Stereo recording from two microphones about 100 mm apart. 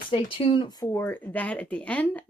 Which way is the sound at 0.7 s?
40° left (ahead or behind).